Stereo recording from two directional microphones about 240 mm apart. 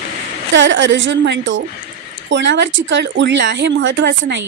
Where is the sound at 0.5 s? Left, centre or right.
Right.